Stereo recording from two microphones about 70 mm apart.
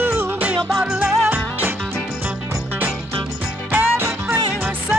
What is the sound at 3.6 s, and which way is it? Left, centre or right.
Music, right.